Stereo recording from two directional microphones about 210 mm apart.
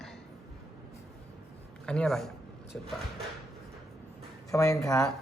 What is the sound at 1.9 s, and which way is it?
Speech, 5° left (ahead or behind).